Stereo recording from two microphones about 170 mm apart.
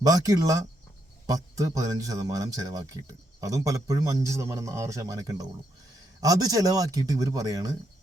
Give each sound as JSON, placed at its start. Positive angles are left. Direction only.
{"t": 0.0, "sound": "speech", "side_deg": -20}